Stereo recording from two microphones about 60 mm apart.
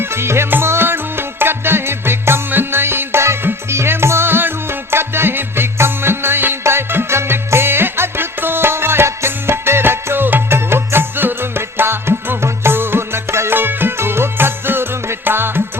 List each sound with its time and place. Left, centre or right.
0.0 s music: right